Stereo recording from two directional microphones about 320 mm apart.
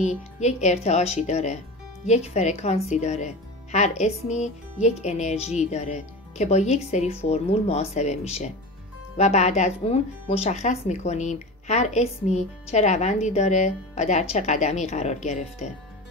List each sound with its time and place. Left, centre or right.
0.0 s speech: left